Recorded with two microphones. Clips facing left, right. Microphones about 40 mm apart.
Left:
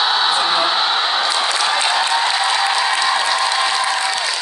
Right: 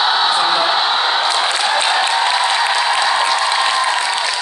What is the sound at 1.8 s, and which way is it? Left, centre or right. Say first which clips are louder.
Applause: right 2 dB; centre.